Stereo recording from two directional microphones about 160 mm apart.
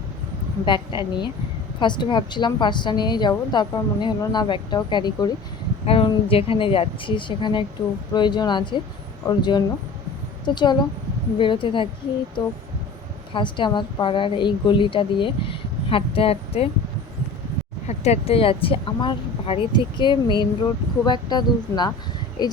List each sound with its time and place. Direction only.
0.6 s a woman's voice: 30° left (ahead or behind)
13.3 s a woman's voice: 30° left (ahead or behind)
17.8 s a woman's voice: 40° left (ahead or behind); by 22.5 s 25° left (ahead or behind)